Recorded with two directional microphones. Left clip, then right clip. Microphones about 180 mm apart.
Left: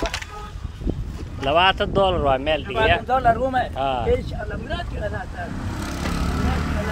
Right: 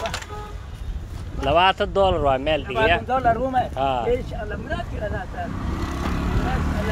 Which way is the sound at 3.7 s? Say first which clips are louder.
Even; 5° right (ahead or behind).